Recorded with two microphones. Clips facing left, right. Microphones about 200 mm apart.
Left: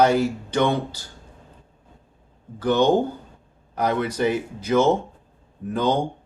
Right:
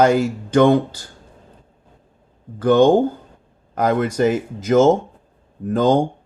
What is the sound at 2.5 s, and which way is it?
Speech, 50° right (ahead or behind).